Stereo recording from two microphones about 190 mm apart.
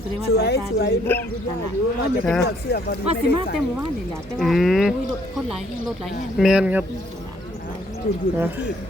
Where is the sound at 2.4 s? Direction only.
55° left (ahead or behind).